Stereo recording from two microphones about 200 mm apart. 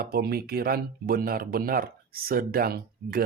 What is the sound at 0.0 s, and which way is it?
Speech, 50° right (ahead or behind).